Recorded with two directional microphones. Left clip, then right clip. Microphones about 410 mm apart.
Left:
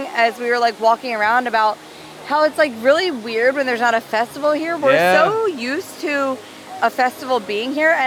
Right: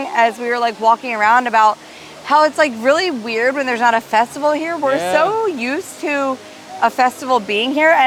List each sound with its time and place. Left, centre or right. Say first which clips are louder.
0.0 s speech: right 2 dB; centre
4.9 s speech: left 5 dB; left
5.1 s speech: even; centre